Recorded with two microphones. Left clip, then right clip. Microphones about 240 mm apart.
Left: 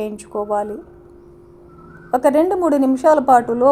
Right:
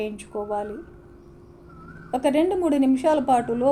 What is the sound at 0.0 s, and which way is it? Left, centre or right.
Speech, left.